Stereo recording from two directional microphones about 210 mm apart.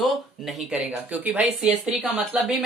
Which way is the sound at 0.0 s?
Centre (ahead or behind).